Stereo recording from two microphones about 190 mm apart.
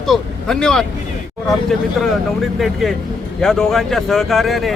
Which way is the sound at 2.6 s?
Centre (ahead or behind).